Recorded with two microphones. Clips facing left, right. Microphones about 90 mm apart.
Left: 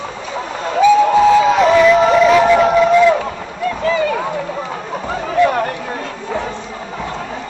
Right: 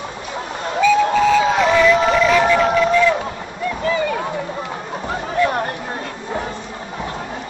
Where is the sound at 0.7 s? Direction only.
20° left (ahead or behind).